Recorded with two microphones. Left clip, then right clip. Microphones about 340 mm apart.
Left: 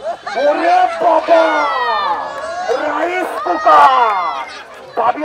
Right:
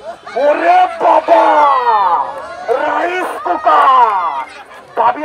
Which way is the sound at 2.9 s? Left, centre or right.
Centre.